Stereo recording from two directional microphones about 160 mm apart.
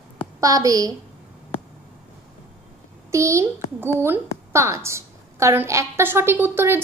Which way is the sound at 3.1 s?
20° right (ahead or behind).